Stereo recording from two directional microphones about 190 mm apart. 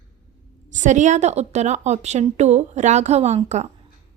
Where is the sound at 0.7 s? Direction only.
40° right (ahead or behind).